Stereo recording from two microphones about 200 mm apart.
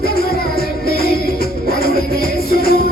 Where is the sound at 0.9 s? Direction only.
50° left (ahead or behind).